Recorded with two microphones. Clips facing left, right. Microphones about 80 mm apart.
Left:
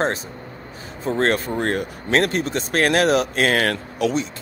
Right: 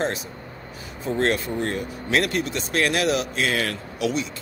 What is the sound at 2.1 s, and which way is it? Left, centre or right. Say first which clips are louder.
Speech: left 3 dB; left.